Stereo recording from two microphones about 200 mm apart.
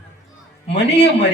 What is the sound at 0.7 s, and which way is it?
Music, 60° left (ahead or behind).